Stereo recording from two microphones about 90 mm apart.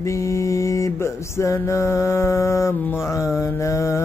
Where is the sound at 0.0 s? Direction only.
35° left (ahead or behind).